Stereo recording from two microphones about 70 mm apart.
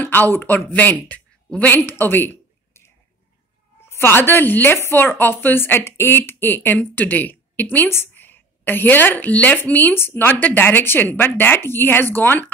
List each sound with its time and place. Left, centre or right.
0.0 s speech: left
1.9 s a sound: left
3.9 s a woman's voice: left